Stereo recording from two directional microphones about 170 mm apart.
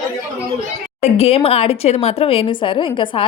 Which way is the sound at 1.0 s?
35° left (ahead or behind).